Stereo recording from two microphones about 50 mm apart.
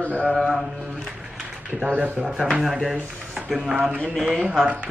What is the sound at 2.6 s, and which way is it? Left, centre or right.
Speech, centre.